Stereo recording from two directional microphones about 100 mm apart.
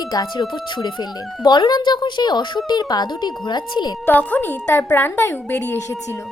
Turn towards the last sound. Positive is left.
turn(degrees=20)  # may be behind; listen again after turning